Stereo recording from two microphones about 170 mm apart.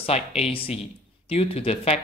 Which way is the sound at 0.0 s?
35° left (ahead or behind).